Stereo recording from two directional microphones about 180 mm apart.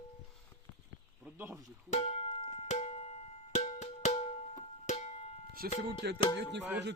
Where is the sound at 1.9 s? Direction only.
35° left (ahead or behind).